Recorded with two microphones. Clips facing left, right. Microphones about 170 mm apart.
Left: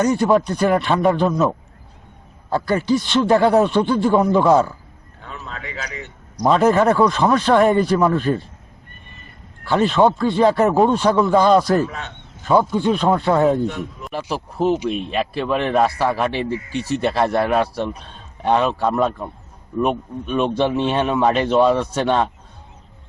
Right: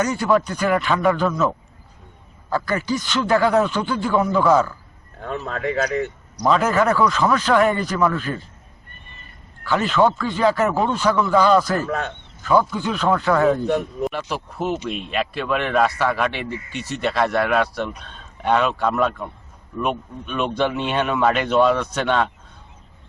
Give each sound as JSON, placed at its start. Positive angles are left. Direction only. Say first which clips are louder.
{"t": 0.0, "sound": "speech", "louder": "left 3 dB", "side_deg": 30}
{"t": 2.5, "sound": "speech", "louder": "left 4 dB", "side_deg": 30}
{"t": 5.2, "sound": "a man's voice", "louder": "right 9 dB", "side_deg": -55}
{"t": 6.5, "sound": "speech", "louder": "left 3 dB", "side_deg": 30}
{"t": 9.6, "sound": "speech", "louder": "left 3 dB", "side_deg": 30}
{"t": 11.9, "sound": "a man's voice", "louder": "right 7 dB", "side_deg": -55}
{"t": 12.5, "sound": "speech", "louder": "left 3 dB", "side_deg": 25}